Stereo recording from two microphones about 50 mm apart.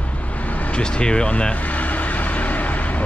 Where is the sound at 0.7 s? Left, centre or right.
Centre.